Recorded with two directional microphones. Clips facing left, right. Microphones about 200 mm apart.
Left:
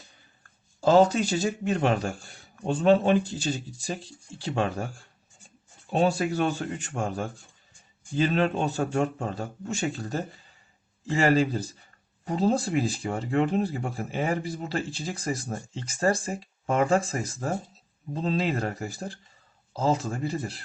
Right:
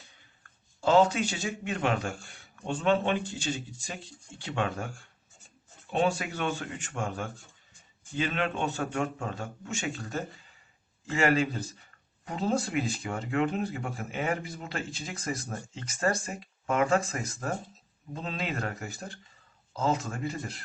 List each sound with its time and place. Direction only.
0.8 s speech: 40° left (ahead or behind)